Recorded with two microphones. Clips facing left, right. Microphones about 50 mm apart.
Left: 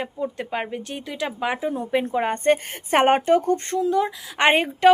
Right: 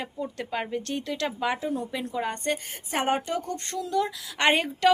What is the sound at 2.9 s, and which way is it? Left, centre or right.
Speech, left.